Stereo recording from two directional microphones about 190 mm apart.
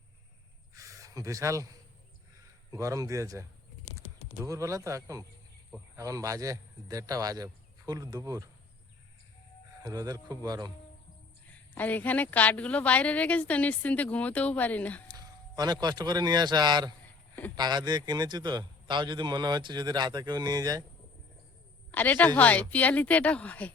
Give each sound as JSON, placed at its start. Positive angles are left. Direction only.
{"t": 0.7, "sound": "a sound", "side_deg": -15}
{"t": 2.7, "sound": "speech", "side_deg": -15}
{"t": 4.4, "sound": "a man's voice", "side_deg": -15}
{"t": 9.8, "sound": "a man's voice", "side_deg": -20}
{"t": 11.5, "sound": "a woman's voice", "side_deg": 10}
{"t": 15.0, "sound": "a man's voice", "side_deg": -20}
{"t": 21.9, "sound": "a woman's voice", "side_deg": 10}